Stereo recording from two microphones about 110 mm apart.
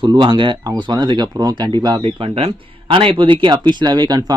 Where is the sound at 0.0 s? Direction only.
40° right (ahead or behind).